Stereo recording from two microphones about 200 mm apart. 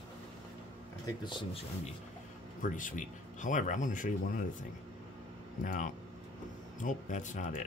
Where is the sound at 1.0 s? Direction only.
20° left (ahead or behind).